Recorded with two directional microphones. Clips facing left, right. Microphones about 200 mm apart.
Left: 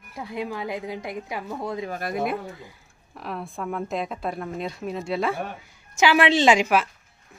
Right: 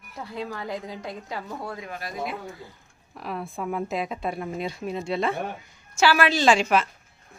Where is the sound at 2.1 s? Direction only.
60° left (ahead or behind).